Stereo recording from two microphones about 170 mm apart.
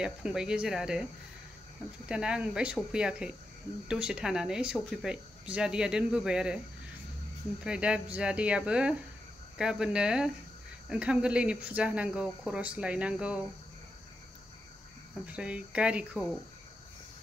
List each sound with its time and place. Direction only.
0.0 s speech: 5° right (ahead or behind)
2.0 s speech: 5° right (ahead or behind)
7.6 s speech: 5° right (ahead or behind)
15.2 s speech: 5° right (ahead or behind)